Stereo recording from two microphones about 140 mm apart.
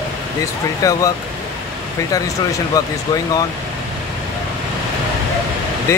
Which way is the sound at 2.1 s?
25° left (ahead or behind).